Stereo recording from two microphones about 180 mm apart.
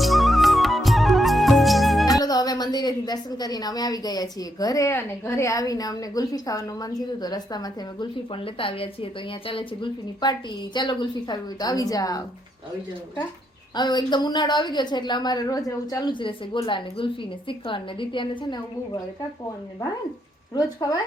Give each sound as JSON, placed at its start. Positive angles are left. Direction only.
{"t": 0.0, "sound": "music", "side_deg": 0}
{"t": 2.1, "sound": "a woman's voice", "side_deg": 20}
{"t": 13.7, "sound": "a woman's voice", "side_deg": 25}
{"t": 20.5, "sound": "a woman's voice", "side_deg": 20}